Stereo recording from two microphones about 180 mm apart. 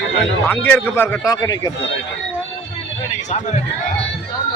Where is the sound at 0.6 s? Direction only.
10° left (ahead or behind).